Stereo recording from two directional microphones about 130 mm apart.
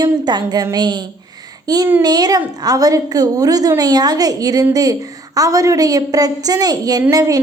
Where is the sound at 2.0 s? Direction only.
30° right (ahead or behind).